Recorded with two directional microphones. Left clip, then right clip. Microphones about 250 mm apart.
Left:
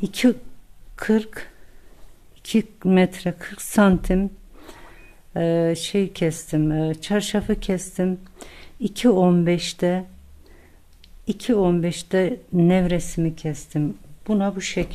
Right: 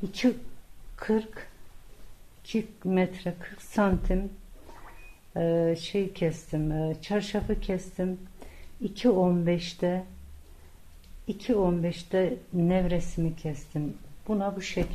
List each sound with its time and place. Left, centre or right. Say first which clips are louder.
0.0 s speech: left 7 dB; left
5.3 s speech: left 5 dB; left
11.2 s speech: left 6 dB; left